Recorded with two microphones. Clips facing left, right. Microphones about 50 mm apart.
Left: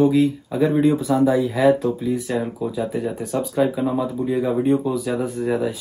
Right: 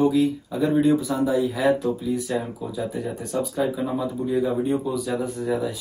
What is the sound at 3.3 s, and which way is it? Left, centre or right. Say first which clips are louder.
Speech: left 4 dB; left.